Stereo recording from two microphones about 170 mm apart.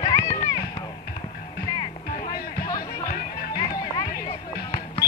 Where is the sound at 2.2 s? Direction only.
20° left (ahead or behind).